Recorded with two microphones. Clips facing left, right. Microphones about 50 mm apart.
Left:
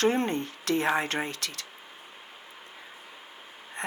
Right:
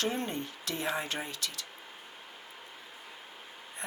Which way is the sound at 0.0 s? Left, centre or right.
Left.